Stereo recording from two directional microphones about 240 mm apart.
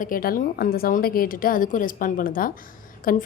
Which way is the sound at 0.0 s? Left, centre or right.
Left.